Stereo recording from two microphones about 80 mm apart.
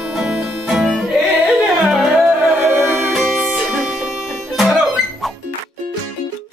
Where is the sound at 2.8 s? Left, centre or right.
Right.